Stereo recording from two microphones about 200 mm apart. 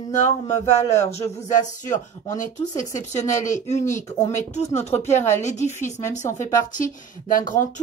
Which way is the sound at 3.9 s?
15° left (ahead or behind).